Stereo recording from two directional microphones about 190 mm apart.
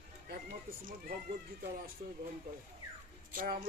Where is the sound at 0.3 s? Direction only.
50° right (ahead or behind).